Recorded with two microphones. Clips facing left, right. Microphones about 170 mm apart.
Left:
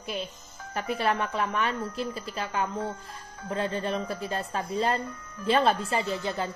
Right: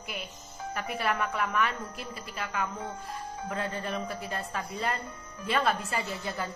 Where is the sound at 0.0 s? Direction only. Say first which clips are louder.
Left 6 dB; 25° left (ahead or behind).